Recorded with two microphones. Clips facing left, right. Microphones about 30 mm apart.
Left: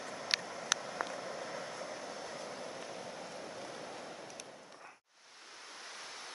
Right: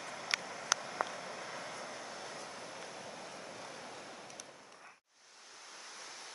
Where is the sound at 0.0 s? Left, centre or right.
Centre.